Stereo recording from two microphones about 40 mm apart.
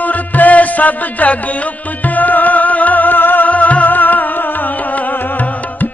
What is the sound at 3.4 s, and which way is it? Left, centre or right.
Music, left.